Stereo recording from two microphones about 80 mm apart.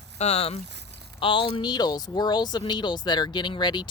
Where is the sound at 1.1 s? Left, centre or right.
Left.